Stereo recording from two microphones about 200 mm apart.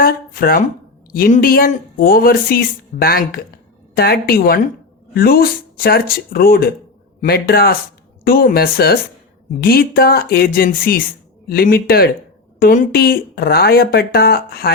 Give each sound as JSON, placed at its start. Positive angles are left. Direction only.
{"t": 0.0, "sound": "speech", "side_deg": 45}